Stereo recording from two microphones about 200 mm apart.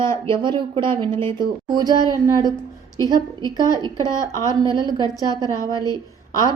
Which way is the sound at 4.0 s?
15° left (ahead or behind).